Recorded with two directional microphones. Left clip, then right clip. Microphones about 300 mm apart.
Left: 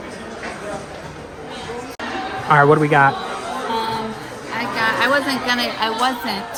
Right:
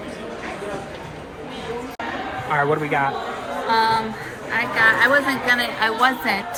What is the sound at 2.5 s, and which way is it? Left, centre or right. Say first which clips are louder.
Speech: left 7 dB; left.